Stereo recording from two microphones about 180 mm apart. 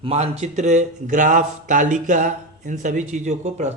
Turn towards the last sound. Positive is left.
turn(degrees=-40)  # may be behind; listen again after turning